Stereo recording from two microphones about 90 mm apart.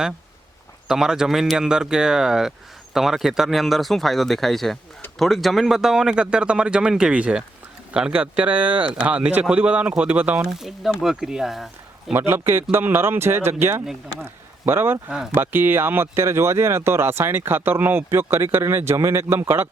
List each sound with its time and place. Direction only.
0.9 s speech: 5° right (ahead or behind)
10.4 s speech: 5° right (ahead or behind)
12.1 s speech: 25° right (ahead or behind)